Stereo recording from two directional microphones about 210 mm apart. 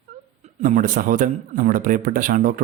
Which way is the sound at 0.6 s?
40° right (ahead or behind).